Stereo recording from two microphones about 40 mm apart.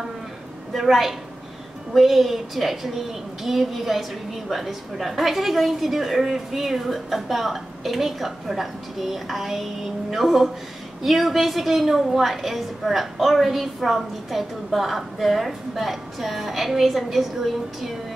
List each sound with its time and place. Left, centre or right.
0.7 s a woman's voice: centre